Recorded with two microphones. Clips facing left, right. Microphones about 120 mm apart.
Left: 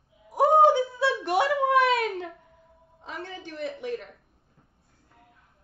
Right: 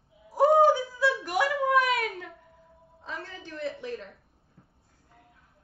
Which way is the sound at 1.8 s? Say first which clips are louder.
Left 4 dB; 25° left (ahead or behind).